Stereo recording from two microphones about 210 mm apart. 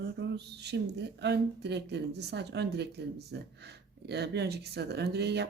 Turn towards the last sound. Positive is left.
turn(degrees=-50)  # may be behind; listen again after turning